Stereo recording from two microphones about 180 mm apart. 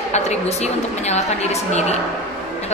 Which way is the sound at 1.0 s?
35° left (ahead or behind).